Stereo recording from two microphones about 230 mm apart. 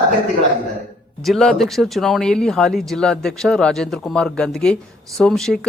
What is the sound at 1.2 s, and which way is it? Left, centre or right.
Speech, centre.